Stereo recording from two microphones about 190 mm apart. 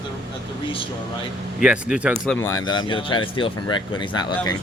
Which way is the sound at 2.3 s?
15° left (ahead or behind).